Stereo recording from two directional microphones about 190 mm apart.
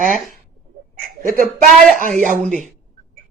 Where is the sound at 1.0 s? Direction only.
50° right (ahead or behind).